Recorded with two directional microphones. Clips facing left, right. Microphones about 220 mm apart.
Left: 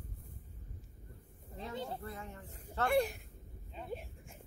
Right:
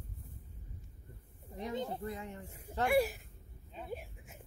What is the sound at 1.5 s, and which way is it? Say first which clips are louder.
Speech: right 4 dB; 15° right (ahead or behind).